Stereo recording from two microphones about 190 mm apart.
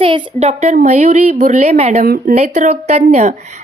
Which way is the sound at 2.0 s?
50° right (ahead or behind).